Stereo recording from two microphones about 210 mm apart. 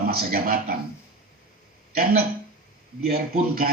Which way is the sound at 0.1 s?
45° right (ahead or behind).